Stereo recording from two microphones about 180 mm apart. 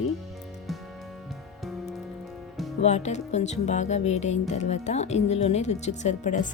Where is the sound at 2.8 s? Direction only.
40° left (ahead or behind).